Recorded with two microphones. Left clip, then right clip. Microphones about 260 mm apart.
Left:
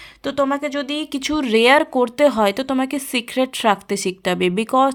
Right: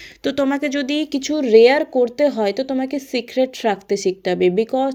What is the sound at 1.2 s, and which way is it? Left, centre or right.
Speech, left.